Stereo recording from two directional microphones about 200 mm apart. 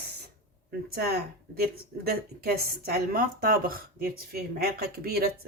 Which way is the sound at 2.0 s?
50° right (ahead or behind).